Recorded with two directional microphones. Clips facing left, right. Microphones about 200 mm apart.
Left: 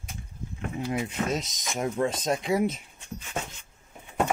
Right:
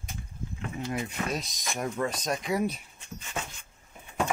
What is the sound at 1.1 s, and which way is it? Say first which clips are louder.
Speech: left 3 dB; 20° left (ahead or behind).